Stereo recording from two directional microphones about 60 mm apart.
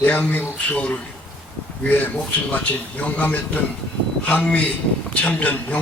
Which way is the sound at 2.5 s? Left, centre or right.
Left.